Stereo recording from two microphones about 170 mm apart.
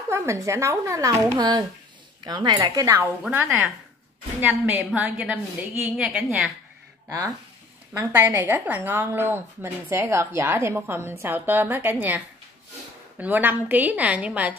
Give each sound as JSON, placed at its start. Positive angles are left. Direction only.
{"t": 0.1, "sound": "a woman's voice", "side_deg": -15}
{"t": 3.0, "sound": "a woman's voice", "side_deg": -10}
{"t": 7.9, "sound": "a woman's voice", "side_deg": -10}
{"t": 13.2, "sound": "a woman's voice", "side_deg": -10}